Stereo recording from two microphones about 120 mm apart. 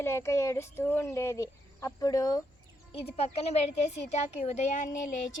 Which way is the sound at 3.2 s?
60° left (ahead or behind).